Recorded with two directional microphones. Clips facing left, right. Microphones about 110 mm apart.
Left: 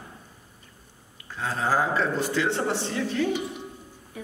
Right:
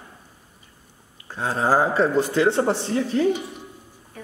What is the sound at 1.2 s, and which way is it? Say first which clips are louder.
A man's voice: right 5 dB; 35° right (ahead or behind).